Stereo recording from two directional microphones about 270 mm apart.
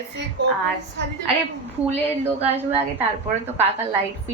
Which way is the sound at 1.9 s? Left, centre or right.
Right.